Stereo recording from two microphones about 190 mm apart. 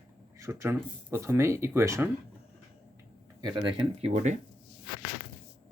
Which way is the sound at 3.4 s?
25° right (ahead or behind).